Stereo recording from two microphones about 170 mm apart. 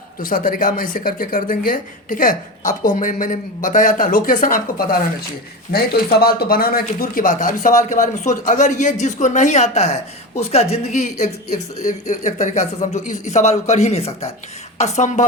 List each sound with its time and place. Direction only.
0.2 s speech: 55° left (ahead or behind)